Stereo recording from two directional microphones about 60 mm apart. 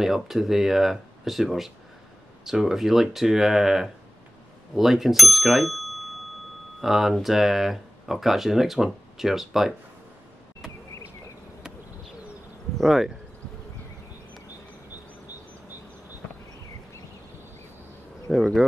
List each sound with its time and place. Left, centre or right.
0.0 s speech: centre
12.7 s speech: centre
18.3 s speech: centre